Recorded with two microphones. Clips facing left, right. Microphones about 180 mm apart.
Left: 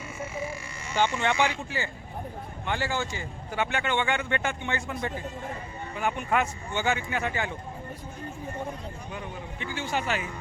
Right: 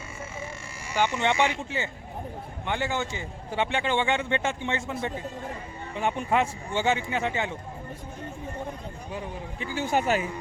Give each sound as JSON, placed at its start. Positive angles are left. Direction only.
{"t": 0.9, "sound": "a man's voice", "side_deg": -15}
{"t": 6.0, "sound": "a man's voice", "side_deg": -25}
{"t": 9.1, "sound": "speech", "side_deg": -40}